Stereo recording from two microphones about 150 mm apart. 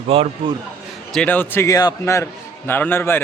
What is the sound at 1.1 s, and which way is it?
A man's voice, 10° left (ahead or behind).